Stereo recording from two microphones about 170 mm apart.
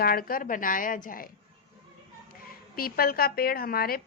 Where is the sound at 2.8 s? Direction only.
60° left (ahead or behind).